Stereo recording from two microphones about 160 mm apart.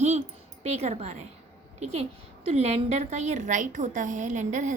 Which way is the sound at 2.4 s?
40° right (ahead or behind).